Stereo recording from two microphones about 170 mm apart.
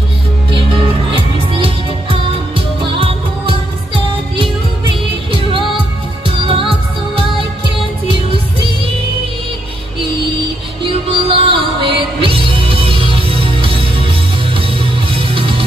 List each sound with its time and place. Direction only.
1.5 s music: 35° right (ahead or behind)
10.8 s music: 30° right (ahead or behind)